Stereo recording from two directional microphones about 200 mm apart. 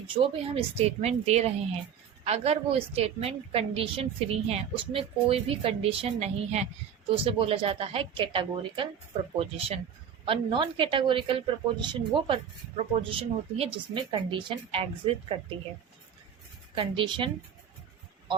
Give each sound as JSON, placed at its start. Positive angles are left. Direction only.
{"t": 0.1, "sound": "a woman's voice", "side_deg": -30}
{"t": 16.7, "sound": "a woman's voice", "side_deg": -25}